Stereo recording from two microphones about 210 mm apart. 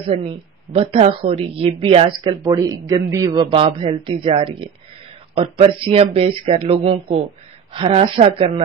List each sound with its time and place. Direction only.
0.1 s a woman's voice: 25° right (ahead or behind)